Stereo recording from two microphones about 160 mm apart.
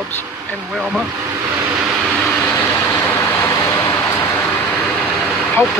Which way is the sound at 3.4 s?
15° left (ahead or behind).